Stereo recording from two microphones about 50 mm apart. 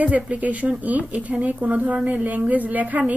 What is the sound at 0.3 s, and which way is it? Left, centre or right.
A woman's voice, right.